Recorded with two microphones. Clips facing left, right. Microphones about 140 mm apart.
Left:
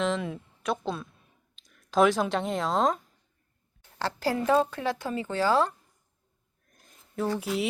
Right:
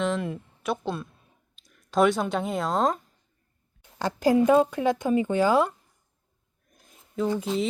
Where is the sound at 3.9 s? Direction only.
15° right (ahead or behind).